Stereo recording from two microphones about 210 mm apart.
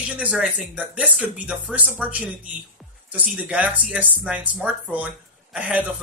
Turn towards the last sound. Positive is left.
turn(degrees=-5)  # may be behind; listen again after turning